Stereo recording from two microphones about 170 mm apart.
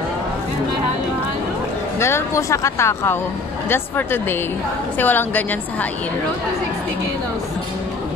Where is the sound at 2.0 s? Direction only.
15° left (ahead or behind).